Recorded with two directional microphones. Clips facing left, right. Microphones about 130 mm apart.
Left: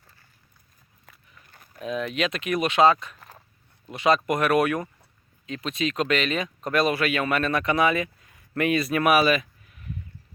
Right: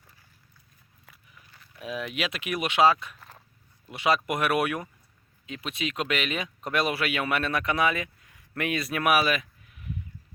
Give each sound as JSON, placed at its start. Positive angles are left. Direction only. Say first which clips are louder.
{"t": 1.0, "sound": "walk", "louder": "left 1 dB", "side_deg": -5}
{"t": 1.5, "sound": "a sound", "louder": "left 5 dB", "side_deg": 50}
{"t": 1.8, "sound": "speech", "louder": "left 5 dB", "side_deg": -10}